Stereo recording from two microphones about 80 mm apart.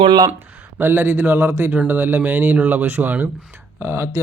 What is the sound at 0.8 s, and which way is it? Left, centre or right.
Speech, right.